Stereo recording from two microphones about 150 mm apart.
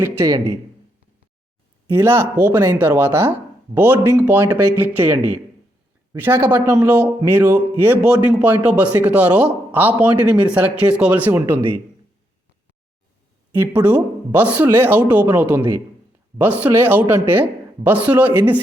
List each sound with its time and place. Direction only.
0.0 s a man's voice: 15° right (ahead or behind)
1.9 s a man's voice: 15° right (ahead or behind)
13.5 s a man's voice: 15° right (ahead or behind)